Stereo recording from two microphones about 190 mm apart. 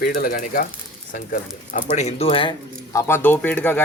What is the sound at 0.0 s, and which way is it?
Speech, 50° left (ahead or behind).